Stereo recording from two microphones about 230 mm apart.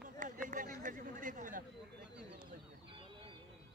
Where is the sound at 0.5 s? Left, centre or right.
Right.